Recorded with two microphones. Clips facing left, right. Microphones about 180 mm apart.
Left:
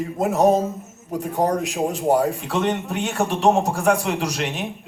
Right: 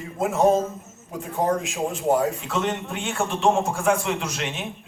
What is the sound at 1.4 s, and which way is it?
Speech, 35° left (ahead or behind).